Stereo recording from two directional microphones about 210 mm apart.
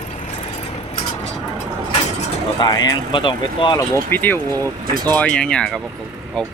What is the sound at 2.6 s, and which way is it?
Speech, 20° left (ahead or behind).